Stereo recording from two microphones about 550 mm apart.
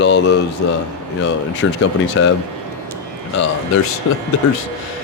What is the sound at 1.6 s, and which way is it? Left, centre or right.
Speech, left.